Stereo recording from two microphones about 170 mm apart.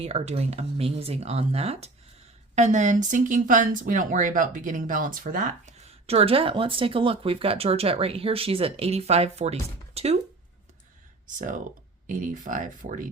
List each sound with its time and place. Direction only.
0.0 s speech: 35° right (ahead or behind)
11.3 s speech: 50° right (ahead or behind)